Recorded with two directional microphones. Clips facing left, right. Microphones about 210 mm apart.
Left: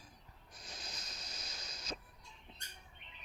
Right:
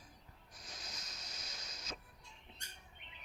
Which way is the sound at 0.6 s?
30° left (ahead or behind).